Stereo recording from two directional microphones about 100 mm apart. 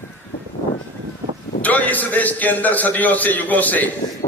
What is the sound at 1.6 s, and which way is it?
A man's voice, 15° left (ahead or behind).